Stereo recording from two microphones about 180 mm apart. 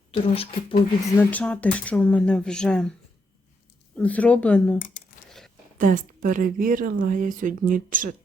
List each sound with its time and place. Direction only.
0.1 s speech: 30° left (ahead or behind)
1.3 s speech: 10° left (ahead or behind)
3.9 s speech: 10° left (ahead or behind)
5.7 s a woman's voice: 45° right (ahead or behind)